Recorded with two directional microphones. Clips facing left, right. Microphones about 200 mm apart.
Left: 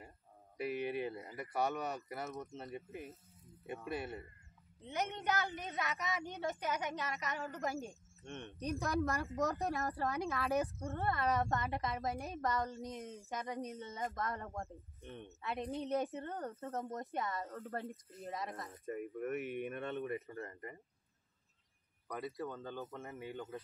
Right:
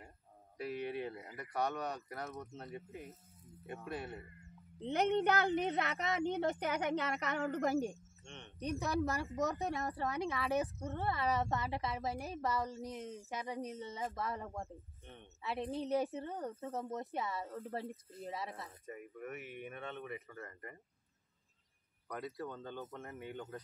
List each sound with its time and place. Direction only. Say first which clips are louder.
0.6 s speech: left 2 dB; 10° left (ahead or behind)
4.7 s a woman's voice: right 8 dB; 60° right (ahead or behind)
8.3 s speech: left 6 dB; 50° left (ahead or behind)
8.5 s speech: right 1 dB; centre (ahead or behind)
18.9 s speech: left 8 dB; 55° left (ahead or behind); by 20.5 s 30° left (ahead or behind)
22.0 s speech: left 1 dB; 5° left (ahead or behind)